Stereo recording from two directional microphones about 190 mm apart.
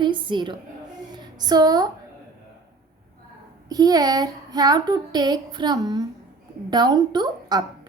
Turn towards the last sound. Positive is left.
turn(degrees=-20)  # may be behind; listen again after turning